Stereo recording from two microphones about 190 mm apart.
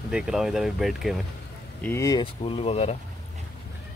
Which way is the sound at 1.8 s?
15° left (ahead or behind).